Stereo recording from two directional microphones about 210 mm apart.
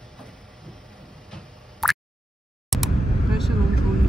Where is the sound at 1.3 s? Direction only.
Centre (ahead or behind).